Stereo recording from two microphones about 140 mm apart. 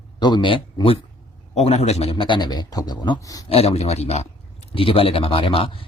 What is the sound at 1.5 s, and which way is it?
Speech, 50° left (ahead or behind).